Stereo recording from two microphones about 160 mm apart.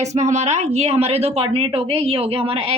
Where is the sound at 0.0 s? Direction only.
45° right (ahead or behind).